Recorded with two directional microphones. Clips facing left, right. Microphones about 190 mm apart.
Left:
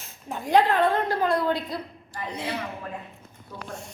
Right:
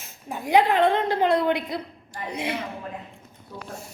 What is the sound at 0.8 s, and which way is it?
A woman's voice, 25° right (ahead or behind).